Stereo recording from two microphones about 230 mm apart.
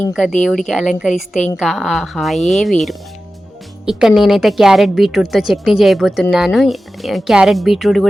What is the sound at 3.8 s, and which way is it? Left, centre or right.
Speech, centre.